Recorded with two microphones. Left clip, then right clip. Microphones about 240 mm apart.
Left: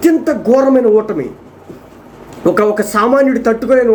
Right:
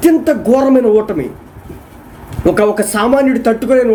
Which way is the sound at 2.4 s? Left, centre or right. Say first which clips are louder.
Even; centre.